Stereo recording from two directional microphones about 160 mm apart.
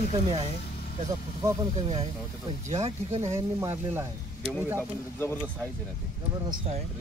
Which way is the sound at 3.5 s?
15° right (ahead or behind).